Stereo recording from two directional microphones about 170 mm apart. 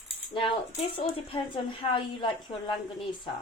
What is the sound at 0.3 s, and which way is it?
Speech, 30° left (ahead or behind).